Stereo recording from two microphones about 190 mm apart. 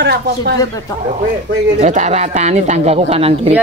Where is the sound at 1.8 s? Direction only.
40° right (ahead or behind).